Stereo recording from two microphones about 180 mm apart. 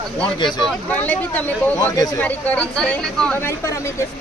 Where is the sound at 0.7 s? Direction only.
10° left (ahead or behind).